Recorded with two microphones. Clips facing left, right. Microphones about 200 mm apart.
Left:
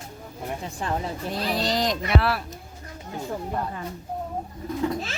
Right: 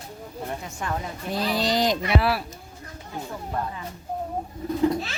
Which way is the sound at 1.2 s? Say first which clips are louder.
Right 3 dB; centre (ahead or behind).